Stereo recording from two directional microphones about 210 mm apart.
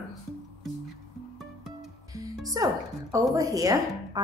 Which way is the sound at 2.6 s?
15° right (ahead or behind).